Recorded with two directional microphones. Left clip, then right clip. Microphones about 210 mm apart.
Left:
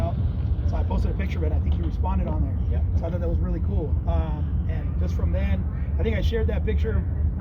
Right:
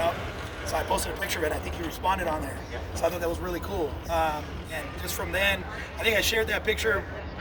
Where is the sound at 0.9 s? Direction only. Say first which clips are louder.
Right 5 dB; 15° right (ahead or behind).